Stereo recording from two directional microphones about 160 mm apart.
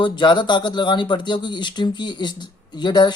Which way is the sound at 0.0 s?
30° left (ahead or behind).